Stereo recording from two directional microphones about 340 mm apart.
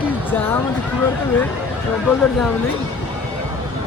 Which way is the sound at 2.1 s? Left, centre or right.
Centre.